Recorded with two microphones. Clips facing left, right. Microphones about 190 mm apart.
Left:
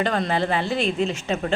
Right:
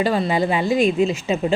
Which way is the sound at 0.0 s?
5° right (ahead or behind).